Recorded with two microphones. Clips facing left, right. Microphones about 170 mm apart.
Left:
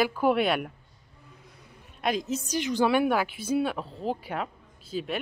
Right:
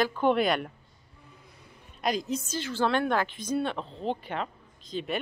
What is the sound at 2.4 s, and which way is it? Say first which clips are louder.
A woman's voice: left 7 dB; 15° left (ahead or behind).